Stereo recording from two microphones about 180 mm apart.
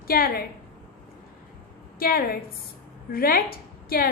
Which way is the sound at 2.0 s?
55° left (ahead or behind).